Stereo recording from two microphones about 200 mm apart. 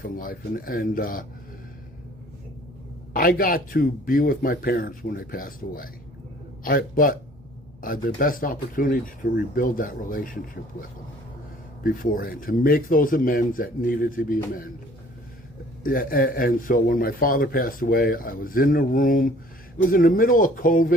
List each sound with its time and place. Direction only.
0.0 s a man's voice: 45° left (ahead or behind)
3.1 s a man's voice: 45° left (ahead or behind)
15.8 s a man's voice: 45° left (ahead or behind)